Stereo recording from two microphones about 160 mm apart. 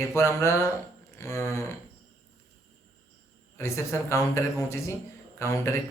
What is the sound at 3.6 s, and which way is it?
Speech, 20° left (ahead or behind).